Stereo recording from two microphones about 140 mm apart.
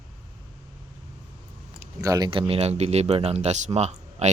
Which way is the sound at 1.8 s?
25° right (ahead or behind).